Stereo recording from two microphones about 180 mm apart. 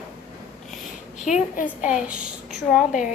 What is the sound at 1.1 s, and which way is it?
A woman's voice, 5° right (ahead or behind).